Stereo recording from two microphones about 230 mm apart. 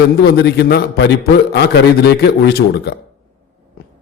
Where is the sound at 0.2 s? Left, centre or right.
Left.